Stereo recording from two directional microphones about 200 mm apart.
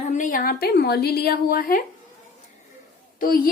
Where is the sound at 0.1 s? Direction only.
40° left (ahead or behind).